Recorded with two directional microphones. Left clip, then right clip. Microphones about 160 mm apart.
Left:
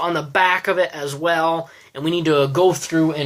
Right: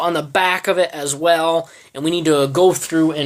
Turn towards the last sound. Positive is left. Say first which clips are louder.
# right 2 dB
turn(degrees=-45)  # may be behind; listen again after turning